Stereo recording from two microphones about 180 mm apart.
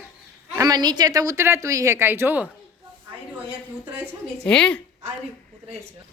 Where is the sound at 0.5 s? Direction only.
20° right (ahead or behind).